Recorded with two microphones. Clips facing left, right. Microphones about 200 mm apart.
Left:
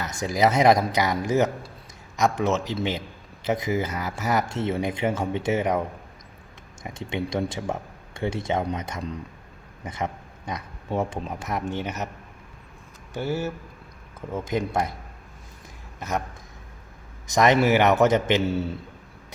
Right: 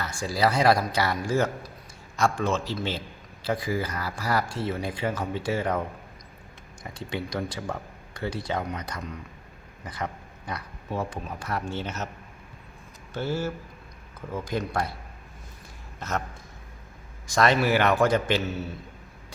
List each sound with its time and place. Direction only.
0.0 s a man's voice: 20° left (ahead or behind)
6.8 s speech: 25° left (ahead or behind)
13.1 s a man's voice: 15° left (ahead or behind)
16.0 s a man's voice: 15° left (ahead or behind)
17.2 s speech: 20° left (ahead or behind)